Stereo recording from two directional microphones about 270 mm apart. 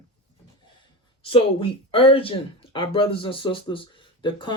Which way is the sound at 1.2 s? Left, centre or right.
Centre.